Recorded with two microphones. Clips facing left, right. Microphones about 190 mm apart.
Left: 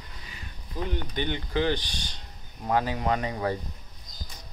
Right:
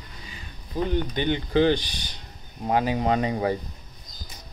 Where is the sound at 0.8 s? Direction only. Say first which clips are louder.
Right 5 dB; 20° right (ahead or behind).